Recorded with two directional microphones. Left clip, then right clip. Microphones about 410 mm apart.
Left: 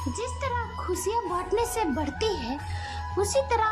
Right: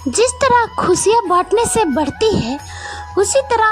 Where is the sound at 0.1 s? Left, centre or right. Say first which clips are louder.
Right 19 dB; centre.